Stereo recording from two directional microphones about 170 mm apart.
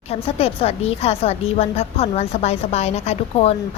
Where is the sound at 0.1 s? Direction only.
35° left (ahead or behind).